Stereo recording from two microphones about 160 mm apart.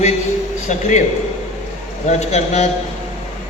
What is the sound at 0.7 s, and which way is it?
Speech, 45° left (ahead or behind).